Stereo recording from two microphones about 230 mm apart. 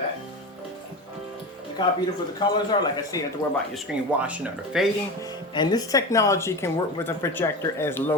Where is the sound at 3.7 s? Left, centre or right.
Centre.